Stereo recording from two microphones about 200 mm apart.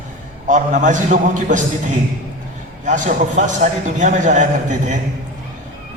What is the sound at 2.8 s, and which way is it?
A man's voice, 35° right (ahead or behind).